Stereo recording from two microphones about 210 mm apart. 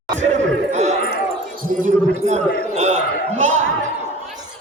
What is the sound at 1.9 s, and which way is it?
A man's voice, 30° right (ahead or behind).